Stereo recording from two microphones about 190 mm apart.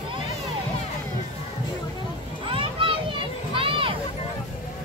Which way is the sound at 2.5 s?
25° right (ahead or behind).